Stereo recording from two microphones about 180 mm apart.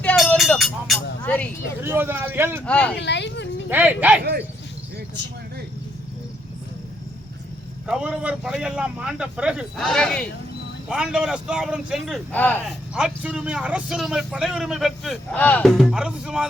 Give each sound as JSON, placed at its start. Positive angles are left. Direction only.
{"t": 0.0, "sound": "vehicle", "side_deg": 10}
{"t": 1.2, "sound": "speech", "side_deg": 10}
{"t": 1.8, "sound": "a man's voice", "side_deg": -10}
{"t": 2.6, "sound": "speech", "side_deg": 5}
{"t": 3.0, "sound": "a sound", "side_deg": 75}
{"t": 3.7, "sound": "a man's voice", "side_deg": -10}
{"t": 4.2, "sound": "speech", "side_deg": -65}
{"t": 7.9, "sound": "speech", "side_deg": -5}
{"t": 12.3, "sound": "speech", "side_deg": 10}
{"t": 12.9, "sound": "speech", "side_deg": -5}